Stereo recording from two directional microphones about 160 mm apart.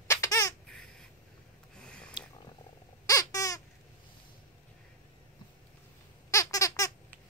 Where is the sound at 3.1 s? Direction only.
20° left (ahead or behind).